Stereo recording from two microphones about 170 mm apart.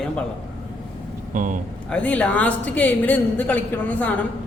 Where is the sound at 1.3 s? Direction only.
50° right (ahead or behind).